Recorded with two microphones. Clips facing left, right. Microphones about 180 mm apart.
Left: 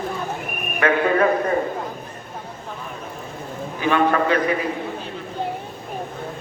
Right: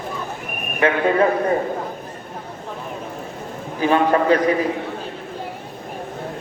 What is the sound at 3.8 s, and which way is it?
Speech, 35° right (ahead or behind).